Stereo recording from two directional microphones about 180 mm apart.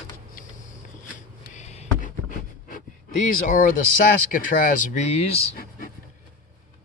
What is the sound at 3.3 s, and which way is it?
Speech, 50° left (ahead or behind).